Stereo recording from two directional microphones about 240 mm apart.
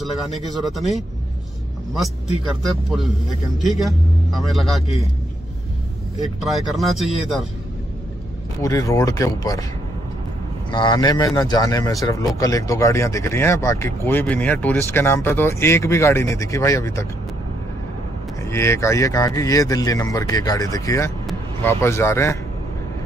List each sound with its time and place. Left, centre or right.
0.0 s speech: centre
3.8 s speech: centre
6.4 s speech: centre
8.6 s speech: centre
10.7 s speech: centre
18.4 s speech: centre